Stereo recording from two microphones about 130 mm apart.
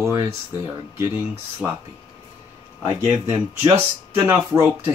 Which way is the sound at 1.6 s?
5° right (ahead or behind).